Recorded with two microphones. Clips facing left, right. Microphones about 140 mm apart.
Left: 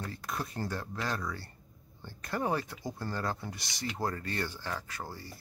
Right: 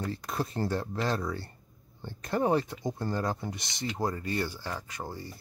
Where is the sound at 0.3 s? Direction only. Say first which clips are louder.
Right 5 dB; 30° right (ahead or behind).